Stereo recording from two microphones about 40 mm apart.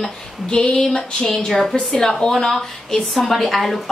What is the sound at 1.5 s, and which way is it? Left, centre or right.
Speech, centre.